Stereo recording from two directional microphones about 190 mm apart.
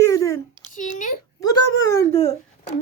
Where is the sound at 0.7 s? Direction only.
40° left (ahead or behind).